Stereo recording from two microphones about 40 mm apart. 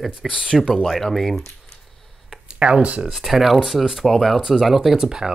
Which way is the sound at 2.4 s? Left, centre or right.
Right.